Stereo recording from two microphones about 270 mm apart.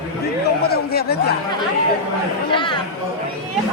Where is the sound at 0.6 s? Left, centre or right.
Left.